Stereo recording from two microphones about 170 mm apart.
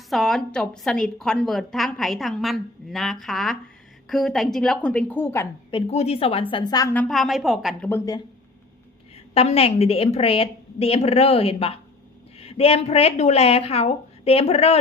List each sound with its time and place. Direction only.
0.1 s a woman's voice: centre (ahead or behind)
5.7 s a woman's voice: 40° left (ahead or behind)
6.9 s a woman's voice: 5° left (ahead or behind)
7.9 s a woman's voice: 15° left (ahead or behind)
9.3 s a woman's voice: 35° left (ahead or behind)